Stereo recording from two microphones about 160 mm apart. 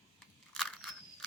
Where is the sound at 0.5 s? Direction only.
Centre (ahead or behind).